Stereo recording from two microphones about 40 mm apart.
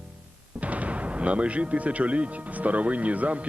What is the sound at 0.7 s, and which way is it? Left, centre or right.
Speech, right.